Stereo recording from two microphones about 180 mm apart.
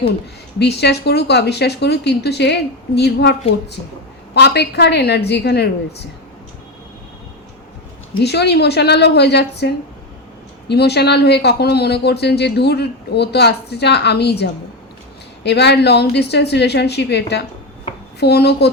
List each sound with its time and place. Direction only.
0.6 s speech: 65° left (ahead or behind)
4.4 s speech: 65° left (ahead or behind)
8.2 s a child's voice: 65° left (ahead or behind)